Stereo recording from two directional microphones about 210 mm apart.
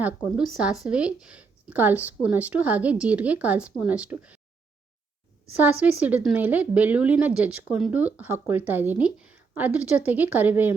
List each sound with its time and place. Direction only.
0.0 s speech: 5° right (ahead or behind)
5.5 s speech: 10° right (ahead or behind)